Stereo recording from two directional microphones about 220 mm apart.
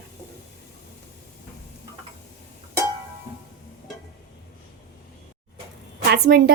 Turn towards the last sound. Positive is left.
turn(degrees=-45)  # may be behind; listen again after turning